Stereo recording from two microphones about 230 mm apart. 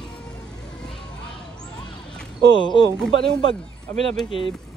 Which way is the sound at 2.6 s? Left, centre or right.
Left.